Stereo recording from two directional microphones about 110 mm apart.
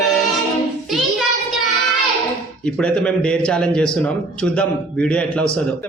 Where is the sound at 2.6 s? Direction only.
10° left (ahead or behind).